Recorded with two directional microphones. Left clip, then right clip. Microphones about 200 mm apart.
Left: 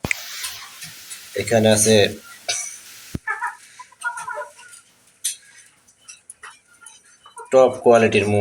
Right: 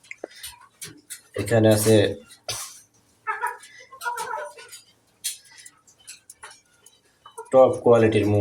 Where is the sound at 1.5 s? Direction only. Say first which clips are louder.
Left 3 dB; 10° left (ahead or behind).